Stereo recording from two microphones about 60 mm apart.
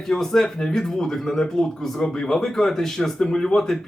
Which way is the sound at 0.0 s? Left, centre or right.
Centre.